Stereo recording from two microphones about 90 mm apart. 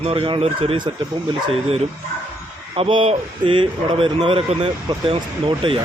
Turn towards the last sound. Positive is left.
turn(degrees=-80)